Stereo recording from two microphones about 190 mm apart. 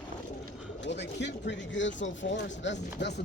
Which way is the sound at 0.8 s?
65° left (ahead or behind).